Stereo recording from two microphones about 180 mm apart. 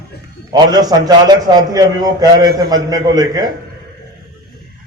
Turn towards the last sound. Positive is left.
turn(degrees=-20)  # may be behind; listen again after turning